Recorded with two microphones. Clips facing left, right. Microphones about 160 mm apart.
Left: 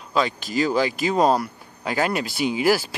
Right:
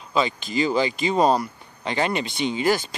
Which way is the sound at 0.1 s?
Centre (ahead or behind).